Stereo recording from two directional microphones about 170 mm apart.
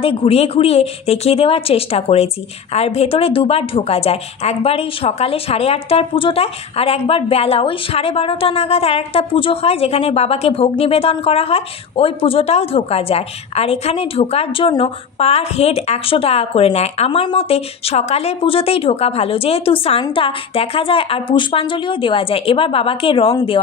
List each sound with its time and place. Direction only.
0.0 s a woman's voice: 35° left (ahead or behind)